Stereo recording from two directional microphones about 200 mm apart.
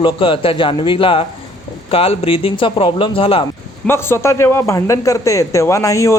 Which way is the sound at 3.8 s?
10° left (ahead or behind).